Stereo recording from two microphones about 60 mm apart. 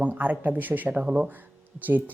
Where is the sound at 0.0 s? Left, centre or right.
Right.